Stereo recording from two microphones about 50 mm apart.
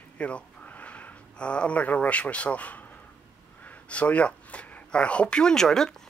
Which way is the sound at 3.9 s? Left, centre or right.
Left.